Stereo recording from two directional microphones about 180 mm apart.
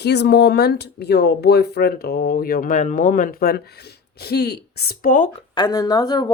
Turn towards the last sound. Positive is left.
turn(degrees=25)  # may be behind; listen again after turning